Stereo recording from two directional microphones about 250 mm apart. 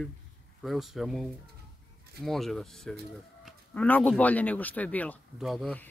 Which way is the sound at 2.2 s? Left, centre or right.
Centre.